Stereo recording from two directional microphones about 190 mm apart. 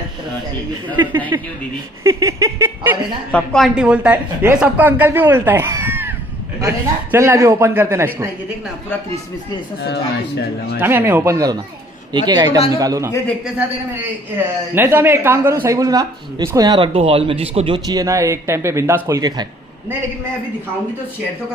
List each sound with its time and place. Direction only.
2.0 s speech: 15° right (ahead or behind)
3.3 s speech: 5° left (ahead or behind); by 8.3 s 15° right (ahead or behind)
10.8 s speech: 10° right (ahead or behind)
14.7 s speech: 10° right (ahead or behind)